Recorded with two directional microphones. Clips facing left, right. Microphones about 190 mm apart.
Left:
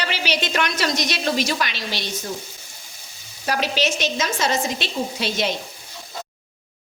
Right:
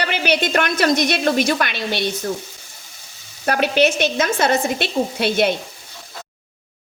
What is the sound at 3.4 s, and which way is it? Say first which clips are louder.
Speech: right 6 dB; 55° right (ahead or behind).